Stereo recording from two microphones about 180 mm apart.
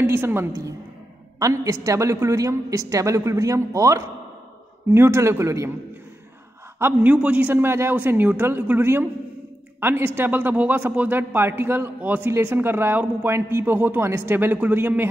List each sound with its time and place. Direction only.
0.0 s speech: 10° right (ahead or behind)
6.8 s speech: 10° right (ahead or behind)